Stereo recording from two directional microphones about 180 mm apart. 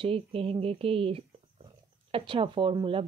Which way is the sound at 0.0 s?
30° right (ahead or behind).